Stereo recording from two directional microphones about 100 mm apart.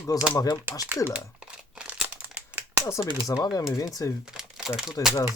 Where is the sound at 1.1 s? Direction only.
10° right (ahead or behind).